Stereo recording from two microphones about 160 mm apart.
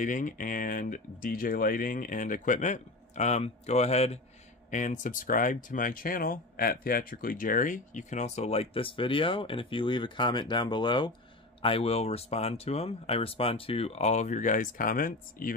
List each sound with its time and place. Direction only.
0.0 s speech: 55° left (ahead or behind)
4.6 s speech: 50° left (ahead or behind)